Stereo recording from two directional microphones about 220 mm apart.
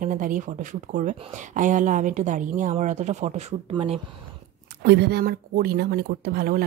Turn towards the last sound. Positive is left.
turn(degrees=-40)  # may be behind; listen again after turning